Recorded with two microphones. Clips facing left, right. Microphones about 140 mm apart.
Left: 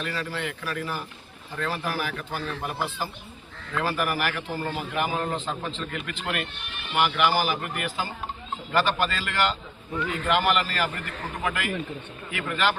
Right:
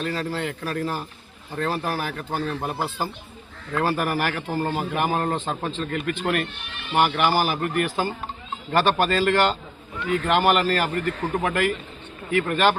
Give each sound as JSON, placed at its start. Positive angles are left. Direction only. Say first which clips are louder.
{"t": 0.0, "sound": "a man's voice", "louder": "right 4 dB", "side_deg": -40}
{"t": 4.9, "sound": "a man's voice", "louder": "right 2 dB", "side_deg": -50}
{"t": 8.7, "sound": "a man's voice", "louder": "right 4 dB", "side_deg": -55}